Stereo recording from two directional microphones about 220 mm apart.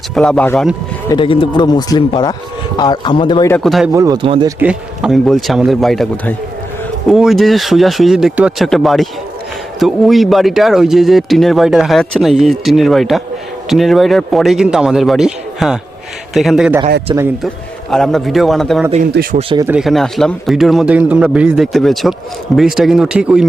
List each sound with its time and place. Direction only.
0.1 s speech: 5° left (ahead or behind)
1.0 s speech: 20° left (ahead or behind)
3.5 s speech: centre (ahead or behind)
3.9 s speech: 15° right (ahead or behind)
4.6 s speech: 5° right (ahead or behind)
17.1 s speech: 20° right (ahead or behind)
17.9 s speech: centre (ahead or behind)
19.1 s speech: 45° right (ahead or behind)
19.4 s speech: 25° right (ahead or behind)
19.6 s speech: 5° right (ahead or behind)